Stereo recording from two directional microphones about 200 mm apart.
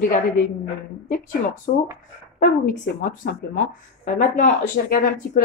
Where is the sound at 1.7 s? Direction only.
50° left (ahead or behind).